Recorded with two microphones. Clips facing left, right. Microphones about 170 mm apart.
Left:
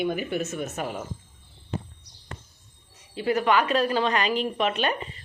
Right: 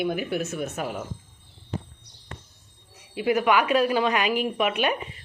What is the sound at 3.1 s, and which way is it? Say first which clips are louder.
A woman's voice: right 1 dB; 10° right (ahead or behind).